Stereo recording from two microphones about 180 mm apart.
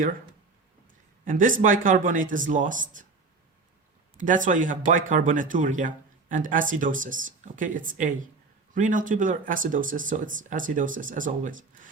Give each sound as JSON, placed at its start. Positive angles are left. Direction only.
{"t": 1.2, "sound": "speech", "side_deg": -50}
{"t": 4.2, "sound": "speech", "side_deg": -45}